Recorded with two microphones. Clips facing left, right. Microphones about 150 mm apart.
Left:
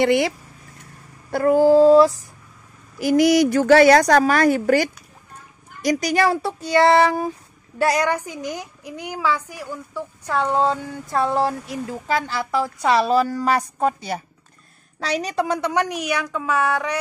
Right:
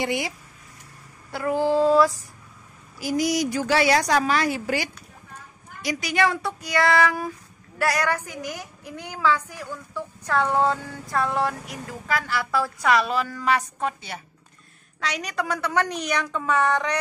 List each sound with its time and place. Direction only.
0.0 s speech: 65° left (ahead or behind)
1.3 s a woman's voice: 45° left (ahead or behind); by 2.1 s 30° left (ahead or behind)
3.0 s a woman's voice: 65° left (ahead or behind); by 12.9 s 20° left (ahead or behind)
12.9 s a woman's voice: 35° left (ahead or behind); by 17.0 s 5° left (ahead or behind)